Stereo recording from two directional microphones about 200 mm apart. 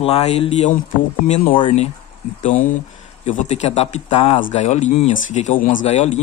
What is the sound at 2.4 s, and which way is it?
Speech, 40° left (ahead or behind).